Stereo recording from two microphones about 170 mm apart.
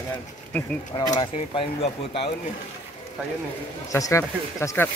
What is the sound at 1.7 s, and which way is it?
Speech, 35° left (ahead or behind).